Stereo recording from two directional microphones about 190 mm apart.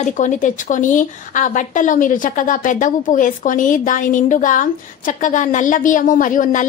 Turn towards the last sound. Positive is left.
turn(degrees=45)  # may be behind; listen again after turning